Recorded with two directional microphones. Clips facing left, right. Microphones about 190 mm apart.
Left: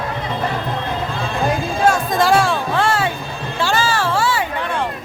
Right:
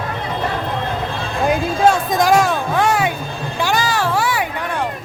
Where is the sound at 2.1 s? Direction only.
15° right (ahead or behind).